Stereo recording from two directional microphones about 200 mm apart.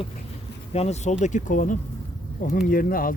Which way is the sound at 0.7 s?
30° left (ahead or behind).